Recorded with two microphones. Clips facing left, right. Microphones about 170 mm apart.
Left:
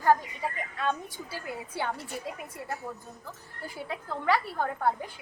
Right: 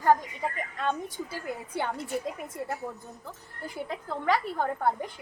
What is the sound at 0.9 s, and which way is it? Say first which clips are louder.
A woman's voice: right 1 dB; 15° right (ahead or behind).